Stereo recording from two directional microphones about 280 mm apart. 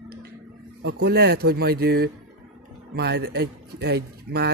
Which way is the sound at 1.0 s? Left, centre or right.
Right.